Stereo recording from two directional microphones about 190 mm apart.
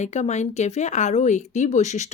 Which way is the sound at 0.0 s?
35° left (ahead or behind).